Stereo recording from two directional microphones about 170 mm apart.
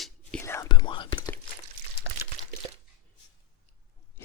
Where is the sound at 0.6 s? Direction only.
25° left (ahead or behind).